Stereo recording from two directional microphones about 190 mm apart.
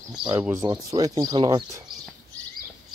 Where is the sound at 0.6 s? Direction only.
20° right (ahead or behind).